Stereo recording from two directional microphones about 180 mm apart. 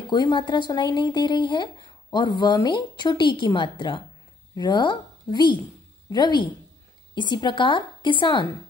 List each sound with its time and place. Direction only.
0.1 s a woman's voice: 25° left (ahead or behind)